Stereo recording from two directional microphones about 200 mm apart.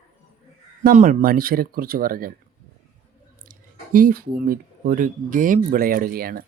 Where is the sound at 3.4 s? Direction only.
45° right (ahead or behind).